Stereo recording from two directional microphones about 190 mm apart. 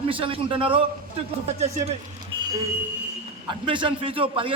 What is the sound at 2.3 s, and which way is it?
Vehicle, 25° right (ahead or behind).